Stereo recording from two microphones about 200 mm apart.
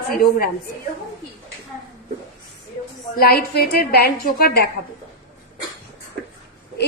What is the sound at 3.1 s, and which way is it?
A woman's voice, 50° left (ahead or behind).